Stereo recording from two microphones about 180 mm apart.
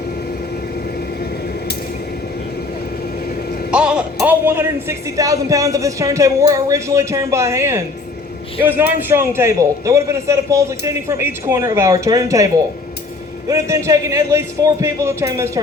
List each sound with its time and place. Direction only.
3.7 s speech: 5° right (ahead or behind)
13.5 s speech: 15° right (ahead or behind)